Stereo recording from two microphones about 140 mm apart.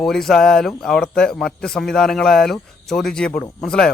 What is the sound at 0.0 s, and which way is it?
Speech, 5° left (ahead or behind).